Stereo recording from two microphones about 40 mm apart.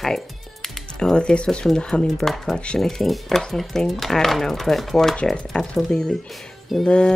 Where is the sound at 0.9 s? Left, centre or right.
Left.